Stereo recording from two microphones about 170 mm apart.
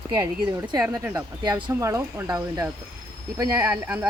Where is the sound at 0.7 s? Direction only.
20° right (ahead or behind).